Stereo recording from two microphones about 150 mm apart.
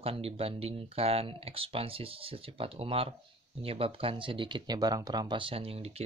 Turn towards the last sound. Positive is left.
turn(degrees=-40)  # may be behind; listen again after turning